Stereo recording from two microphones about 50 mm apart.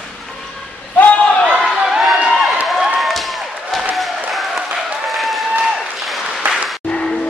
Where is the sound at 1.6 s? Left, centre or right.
Centre.